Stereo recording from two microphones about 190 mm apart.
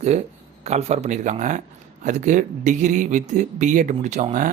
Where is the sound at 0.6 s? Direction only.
35° right (ahead or behind).